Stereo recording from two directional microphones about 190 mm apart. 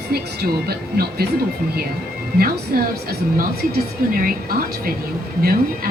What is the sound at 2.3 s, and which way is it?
Speech, 50° right (ahead or behind).